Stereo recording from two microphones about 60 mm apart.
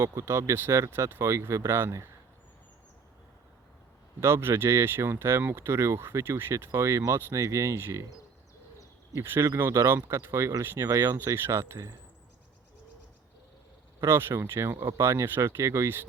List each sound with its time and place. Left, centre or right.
0.0 s speech: right
4.2 s speech: right
6.7 s speech: right
9.1 s speech: right
14.0 s speech: right